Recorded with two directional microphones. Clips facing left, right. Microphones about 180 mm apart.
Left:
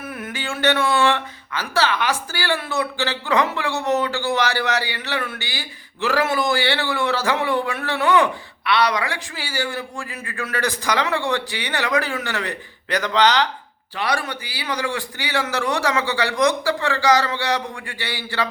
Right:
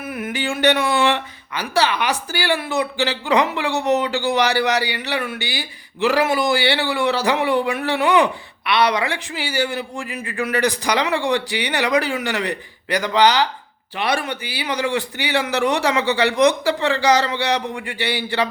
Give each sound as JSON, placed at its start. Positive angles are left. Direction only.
{"t": 0.1, "sound": "speech", "side_deg": -10}
{"t": 13.9, "sound": "a man's voice", "side_deg": -20}